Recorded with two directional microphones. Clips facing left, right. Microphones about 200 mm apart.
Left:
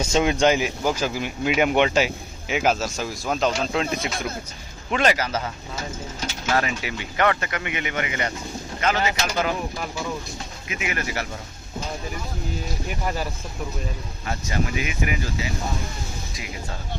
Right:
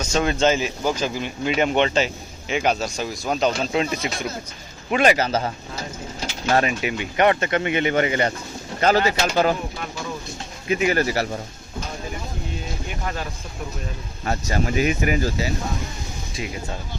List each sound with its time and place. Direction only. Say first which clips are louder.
0.2 s speech: even; 15° left (ahead or behind); by 5.1 s 10° right (ahead or behind)
5.1 s speech: right 5 dB; 30° right (ahead or behind)
6.5 s speech: right 4 dB; 25° right (ahead or behind)
7.6 s speech: right 8 dB; 35° right (ahead or behind)
10.7 s speech: right 9 dB; 35° right (ahead or behind)
14.3 s speech: right 3 dB; 40° right (ahead or behind)